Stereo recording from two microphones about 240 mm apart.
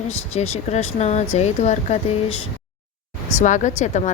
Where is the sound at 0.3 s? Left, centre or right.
Left.